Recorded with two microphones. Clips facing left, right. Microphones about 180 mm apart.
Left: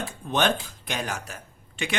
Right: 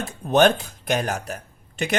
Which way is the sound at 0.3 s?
45° right (ahead or behind).